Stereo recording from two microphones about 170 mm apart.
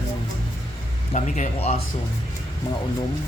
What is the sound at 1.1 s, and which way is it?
Speech, 45° left (ahead or behind).